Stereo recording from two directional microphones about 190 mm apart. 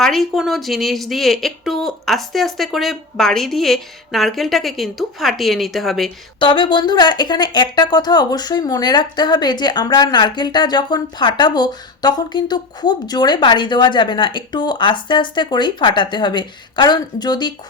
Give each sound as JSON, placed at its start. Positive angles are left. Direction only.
{"t": 0.0, "sound": "speech", "side_deg": 0}
{"t": 6.4, "sound": "speech", "side_deg": 25}